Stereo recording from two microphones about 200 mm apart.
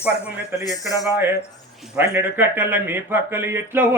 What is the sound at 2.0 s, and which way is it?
Speech, 10° right (ahead or behind).